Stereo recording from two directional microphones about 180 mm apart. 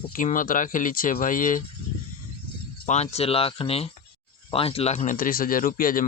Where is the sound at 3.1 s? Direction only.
35° left (ahead or behind).